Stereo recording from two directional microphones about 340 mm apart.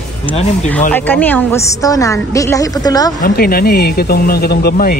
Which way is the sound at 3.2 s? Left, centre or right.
Left.